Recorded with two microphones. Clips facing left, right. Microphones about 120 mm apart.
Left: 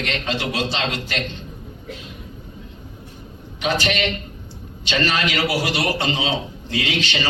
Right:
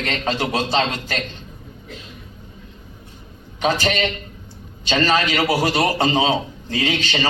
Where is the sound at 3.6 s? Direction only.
40° right (ahead or behind).